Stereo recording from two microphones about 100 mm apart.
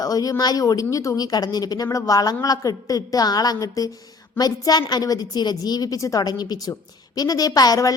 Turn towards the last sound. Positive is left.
turn(degrees=40)  # may be behind; listen again after turning